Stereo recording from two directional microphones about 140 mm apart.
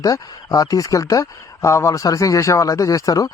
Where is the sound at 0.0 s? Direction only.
25° left (ahead or behind).